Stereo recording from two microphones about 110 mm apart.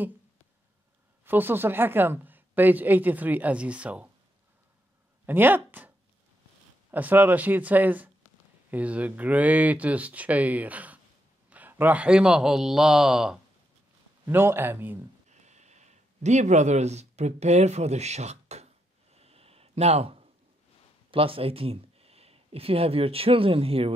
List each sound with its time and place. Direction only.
1.2 s a woman's voice: 20° right (ahead or behind)
5.2 s a woman's voice: 20° right (ahead or behind)
14.2 s a man's voice: 20° right (ahead or behind)
15.2 s speech: 90° right
19.1 s a sound: 65° right (ahead or behind)
21.1 s speech: 55° right (ahead or behind)